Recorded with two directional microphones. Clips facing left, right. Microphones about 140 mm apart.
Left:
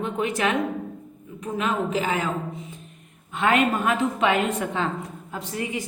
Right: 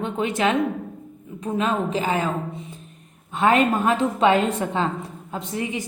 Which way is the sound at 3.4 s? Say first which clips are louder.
Right 3 dB; 35° right (ahead or behind).